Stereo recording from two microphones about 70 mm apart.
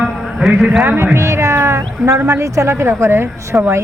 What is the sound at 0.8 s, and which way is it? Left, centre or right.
A woman's voice, right.